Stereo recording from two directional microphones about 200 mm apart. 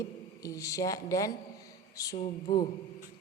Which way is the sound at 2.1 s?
35° left (ahead or behind).